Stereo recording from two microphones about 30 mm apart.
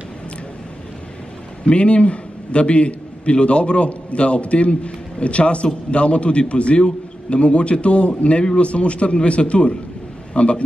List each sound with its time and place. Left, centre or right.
1.7 s a man's voice: left